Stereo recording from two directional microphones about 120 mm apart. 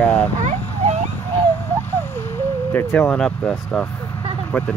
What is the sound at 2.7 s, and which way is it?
Speech, 15° left (ahead or behind).